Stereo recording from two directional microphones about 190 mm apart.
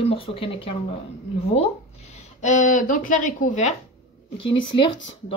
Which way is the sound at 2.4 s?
40° left (ahead or behind).